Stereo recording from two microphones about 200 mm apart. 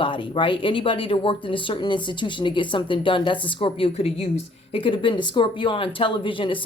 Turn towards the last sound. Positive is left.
turn(degrees=25)  # may be behind; listen again after turning